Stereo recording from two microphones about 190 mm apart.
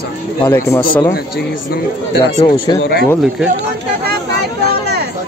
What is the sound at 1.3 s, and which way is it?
Speech, 60° left (ahead or behind).